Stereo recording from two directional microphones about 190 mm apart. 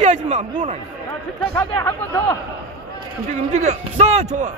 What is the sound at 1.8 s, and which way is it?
Speech, 10° left (ahead or behind).